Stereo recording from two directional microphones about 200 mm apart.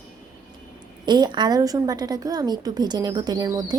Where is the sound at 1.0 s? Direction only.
20° right (ahead or behind).